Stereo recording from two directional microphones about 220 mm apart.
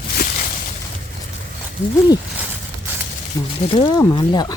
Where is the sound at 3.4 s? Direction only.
15° left (ahead or behind).